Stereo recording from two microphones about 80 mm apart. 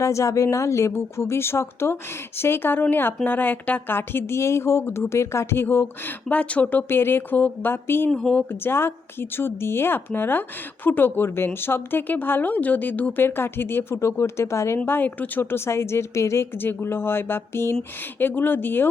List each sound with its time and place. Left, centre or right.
0.0 s a woman's voice: left
8.1 s speech: centre
8.6 s speech: left
14.8 s a woman's voice: left